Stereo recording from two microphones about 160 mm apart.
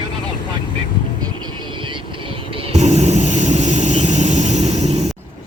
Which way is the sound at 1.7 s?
30° right (ahead or behind).